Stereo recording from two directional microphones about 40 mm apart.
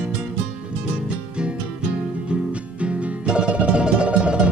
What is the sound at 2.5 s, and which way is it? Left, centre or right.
Music, right.